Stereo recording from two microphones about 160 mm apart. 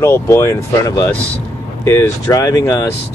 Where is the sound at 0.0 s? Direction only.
15° left (ahead or behind).